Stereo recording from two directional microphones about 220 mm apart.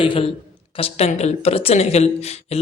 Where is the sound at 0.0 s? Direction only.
25° left (ahead or behind).